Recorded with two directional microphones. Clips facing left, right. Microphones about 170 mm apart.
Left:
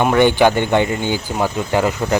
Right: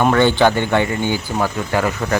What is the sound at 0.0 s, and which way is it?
Speech, 15° left (ahead or behind).